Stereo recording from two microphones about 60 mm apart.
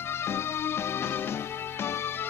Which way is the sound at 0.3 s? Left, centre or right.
Left.